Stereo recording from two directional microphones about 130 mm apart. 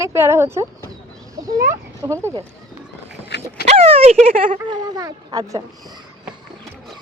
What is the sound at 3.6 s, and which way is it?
Speech, 50° right (ahead or behind).